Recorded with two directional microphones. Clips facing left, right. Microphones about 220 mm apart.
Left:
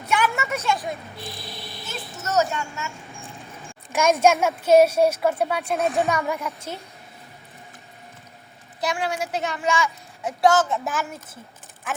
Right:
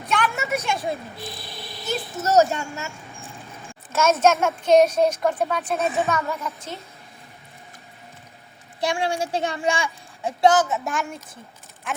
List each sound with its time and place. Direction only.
0.0 s a sound: 10° left (ahead or behind)
0.5 s a sound: 15° right (ahead or behind)
1.9 s a child's voice: 35° right (ahead or behind)
3.9 s a child's voice: 10° left (ahead or behind)
5.8 s speech: centre (ahead or behind)
6.1 s a child's voice: 10° left (ahead or behind)
8.8 s a woman's voice: 30° right (ahead or behind)
10.7 s speech: 5° left (ahead or behind)